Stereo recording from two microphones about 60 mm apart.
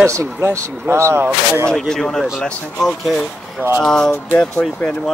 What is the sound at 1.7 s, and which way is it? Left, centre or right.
Speech, centre.